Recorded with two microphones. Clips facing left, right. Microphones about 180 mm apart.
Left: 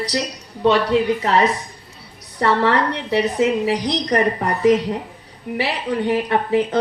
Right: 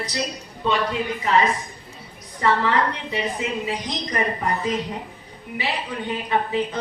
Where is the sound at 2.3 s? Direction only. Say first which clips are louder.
Left 3 dB; 70° left (ahead or behind).